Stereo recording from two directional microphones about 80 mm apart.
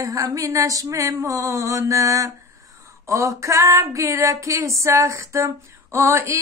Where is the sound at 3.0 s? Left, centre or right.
Right.